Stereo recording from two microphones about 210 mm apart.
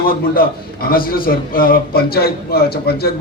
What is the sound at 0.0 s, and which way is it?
A man's voice, 45° left (ahead or behind).